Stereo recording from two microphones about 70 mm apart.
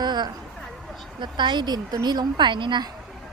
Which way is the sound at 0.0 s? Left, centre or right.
Right.